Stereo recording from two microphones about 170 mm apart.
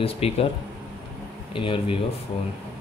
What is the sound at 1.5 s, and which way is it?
Speech, 30° left (ahead or behind).